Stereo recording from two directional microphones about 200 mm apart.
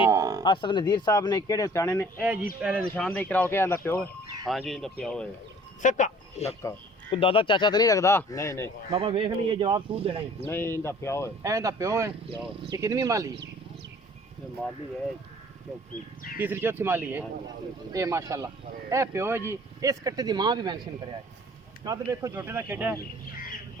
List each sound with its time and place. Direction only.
0.1 s a sound: 15° right (ahead or behind)
0.4 s speech: 25° left (ahead or behind)
2.6 s speech: 5° right (ahead or behind)
2.9 s speech: 5° left (ahead or behind)
4.4 s speech: centre (ahead or behind)
5.8 s a man's voice: 35° left (ahead or behind)
6.6 s speech: 20° left (ahead or behind)
8.9 s speech: 25° right (ahead or behind)
10.4 s speech: 10° left (ahead or behind)
11.4 s speech: 15° right (ahead or behind)
16.4 s speech: 10° right (ahead or behind)